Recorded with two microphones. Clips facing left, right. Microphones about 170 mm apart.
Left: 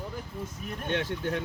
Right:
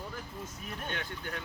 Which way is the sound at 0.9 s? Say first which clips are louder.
Left 14 dB; 80° left.